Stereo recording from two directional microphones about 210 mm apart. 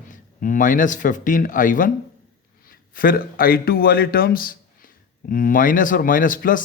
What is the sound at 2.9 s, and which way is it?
A man's voice, 45° left (ahead or behind).